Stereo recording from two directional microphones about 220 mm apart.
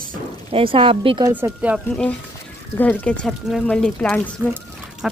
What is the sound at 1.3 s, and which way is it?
Speech, 10° right (ahead or behind).